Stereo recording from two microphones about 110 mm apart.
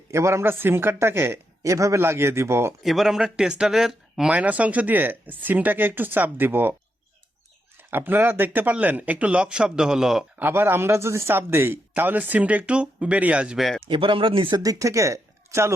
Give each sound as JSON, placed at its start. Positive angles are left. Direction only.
{"t": 0.1, "sound": "speech", "side_deg": -25}
{"t": 2.8, "sound": "speech", "side_deg": 0}
{"t": 7.8, "sound": "speech", "side_deg": -20}
{"t": 10.3, "sound": "speech", "side_deg": -20}
{"t": 13.8, "sound": "speech", "side_deg": -50}
{"t": 14.6, "sound": "speech", "side_deg": -30}